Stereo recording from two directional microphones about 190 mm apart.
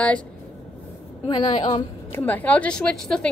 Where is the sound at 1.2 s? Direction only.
20° left (ahead or behind).